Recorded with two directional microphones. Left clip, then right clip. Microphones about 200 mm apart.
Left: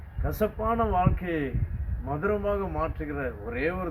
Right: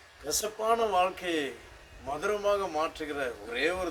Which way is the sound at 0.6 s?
20° right (ahead or behind).